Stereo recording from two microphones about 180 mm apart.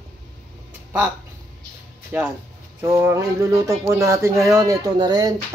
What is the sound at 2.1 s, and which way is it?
Speech, 10° right (ahead or behind).